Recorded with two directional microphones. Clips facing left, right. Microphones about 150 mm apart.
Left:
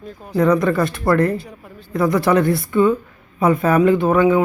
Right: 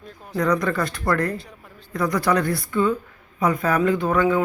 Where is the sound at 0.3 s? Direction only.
25° left (ahead or behind).